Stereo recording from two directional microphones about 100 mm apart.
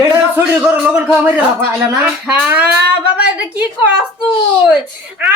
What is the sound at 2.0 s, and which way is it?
A woman's voice, 10° right (ahead or behind).